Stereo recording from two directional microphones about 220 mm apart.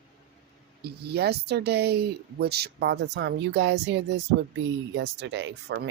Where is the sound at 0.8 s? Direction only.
45° right (ahead or behind).